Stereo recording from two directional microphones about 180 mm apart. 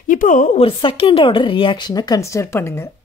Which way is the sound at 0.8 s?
30° left (ahead or behind).